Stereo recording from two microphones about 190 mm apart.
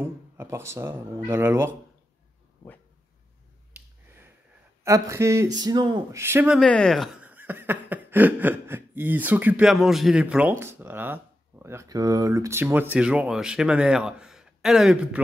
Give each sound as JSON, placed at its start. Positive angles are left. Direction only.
{"t": 0.0, "sound": "speech", "side_deg": -15}
{"t": 4.8, "sound": "speech", "side_deg": -15}
{"t": 6.6, "sound": "speech", "side_deg": 5}